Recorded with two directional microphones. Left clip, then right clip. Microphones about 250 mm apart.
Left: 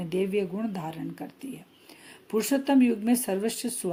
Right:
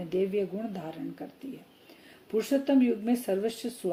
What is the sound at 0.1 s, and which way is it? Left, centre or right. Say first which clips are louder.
Speech: left 1 dB; left.